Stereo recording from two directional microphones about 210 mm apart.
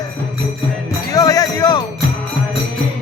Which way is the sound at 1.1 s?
15° left (ahead or behind).